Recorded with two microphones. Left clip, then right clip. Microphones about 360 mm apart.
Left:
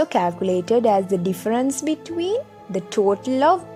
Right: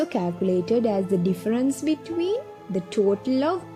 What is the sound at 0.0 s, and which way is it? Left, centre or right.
A woman's voice, centre.